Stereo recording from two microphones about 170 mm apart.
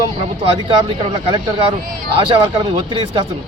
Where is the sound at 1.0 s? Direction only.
30° right (ahead or behind).